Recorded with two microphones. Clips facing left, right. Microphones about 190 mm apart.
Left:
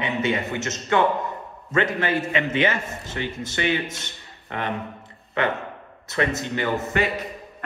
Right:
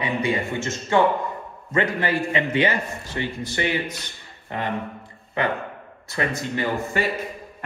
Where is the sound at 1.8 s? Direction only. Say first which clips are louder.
Even; 20° left (ahead or behind).